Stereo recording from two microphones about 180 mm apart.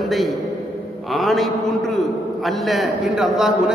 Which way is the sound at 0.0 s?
Centre (ahead or behind).